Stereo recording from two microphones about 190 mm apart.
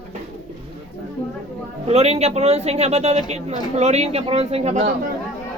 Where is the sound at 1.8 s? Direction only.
35° right (ahead or behind).